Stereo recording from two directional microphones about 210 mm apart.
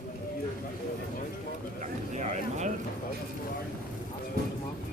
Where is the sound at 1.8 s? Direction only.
35° right (ahead or behind).